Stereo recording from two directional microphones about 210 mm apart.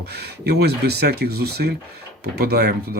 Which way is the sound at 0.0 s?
50° right (ahead or behind).